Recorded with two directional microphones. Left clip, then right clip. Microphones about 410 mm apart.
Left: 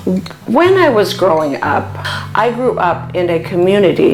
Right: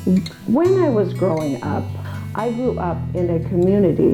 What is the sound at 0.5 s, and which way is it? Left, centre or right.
Speech, centre.